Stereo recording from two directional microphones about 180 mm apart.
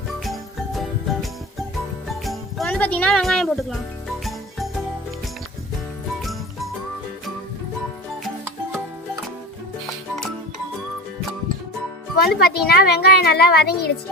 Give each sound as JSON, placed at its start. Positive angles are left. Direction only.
{"t": 0.3, "sound": "music", "side_deg": 0}
{"t": 2.6, "sound": "a woman's voice", "side_deg": 10}
{"t": 4.2, "sound": "music", "side_deg": 0}
{"t": 12.1, "sound": "a woman's voice", "side_deg": 60}